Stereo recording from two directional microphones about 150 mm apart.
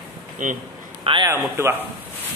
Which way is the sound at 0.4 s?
60° right (ahead or behind).